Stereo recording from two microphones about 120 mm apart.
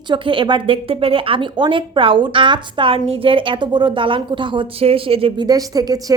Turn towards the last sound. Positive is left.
turn(degrees=-30)  # may be behind; listen again after turning